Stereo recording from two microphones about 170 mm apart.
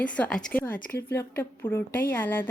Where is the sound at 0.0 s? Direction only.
5° left (ahead or behind).